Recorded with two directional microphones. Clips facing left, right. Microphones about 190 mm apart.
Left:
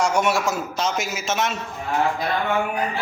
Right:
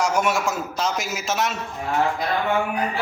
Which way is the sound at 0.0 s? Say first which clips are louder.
Left 1 dB; centre (ahead or behind).